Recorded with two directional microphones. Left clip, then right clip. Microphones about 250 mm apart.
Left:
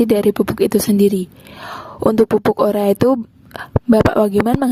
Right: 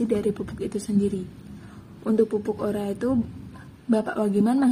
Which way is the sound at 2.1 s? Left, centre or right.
Left.